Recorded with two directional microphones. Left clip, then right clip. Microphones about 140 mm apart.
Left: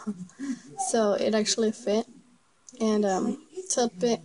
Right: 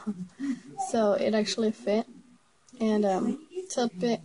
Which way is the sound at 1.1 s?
30° left (ahead or behind).